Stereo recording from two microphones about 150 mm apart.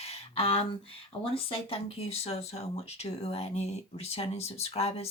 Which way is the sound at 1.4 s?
40° left (ahead or behind).